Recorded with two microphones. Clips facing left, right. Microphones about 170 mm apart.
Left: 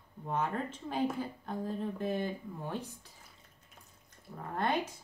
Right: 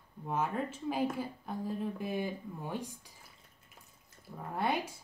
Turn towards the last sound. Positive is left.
turn(degrees=-10)  # may be behind; listen again after turning